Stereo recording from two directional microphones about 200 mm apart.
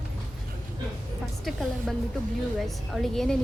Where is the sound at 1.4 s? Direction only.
Centre (ahead or behind).